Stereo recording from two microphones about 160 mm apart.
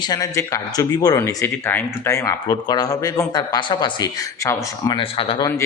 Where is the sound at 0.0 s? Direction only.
20° left (ahead or behind).